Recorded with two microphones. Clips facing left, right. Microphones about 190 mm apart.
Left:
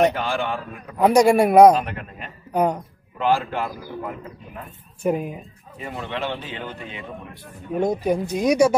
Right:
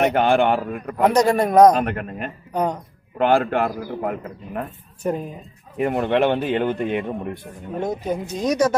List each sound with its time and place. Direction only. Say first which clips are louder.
0.0 s a man's voice: right 4 dB; 60° right (ahead or behind)
1.0 s speech: left 2 dB; 10° left (ahead or behind)
1.8 s a man's voice: right 5 dB; 55° right (ahead or behind)
2.5 s speech: left 2 dB; 10° left (ahead or behind)
3.2 s a man's voice: right 4 dB; 60° right (ahead or behind)
5.0 s speech: left 2 dB; 10° left (ahead or behind)
5.8 s a man's voice: right 11 dB; 60° right (ahead or behind)
7.8 s speech: left 4 dB; 10° left (ahead or behind)